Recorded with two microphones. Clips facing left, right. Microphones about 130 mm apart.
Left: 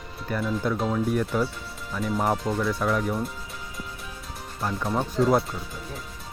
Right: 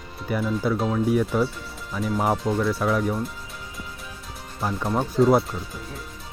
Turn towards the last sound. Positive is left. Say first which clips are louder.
# right 3 dB
turn(degrees=0)  # may be behind; listen again after turning